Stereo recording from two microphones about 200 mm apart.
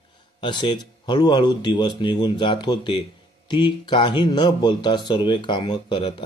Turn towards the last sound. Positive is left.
turn(degrees=25)  # may be behind; listen again after turning